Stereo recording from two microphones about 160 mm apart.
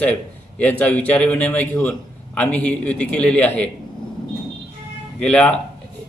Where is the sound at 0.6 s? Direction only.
10° left (ahead or behind).